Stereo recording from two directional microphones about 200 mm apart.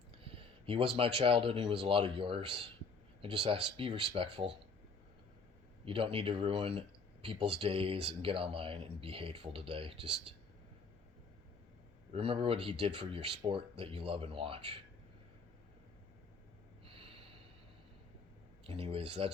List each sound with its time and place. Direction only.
0.1 s speech: 30° right (ahead or behind)
5.8 s speech: 25° right (ahead or behind)
12.1 s speech: 25° right (ahead or behind)
16.8 s snort: 30° right (ahead or behind)
18.6 s speech: 25° right (ahead or behind)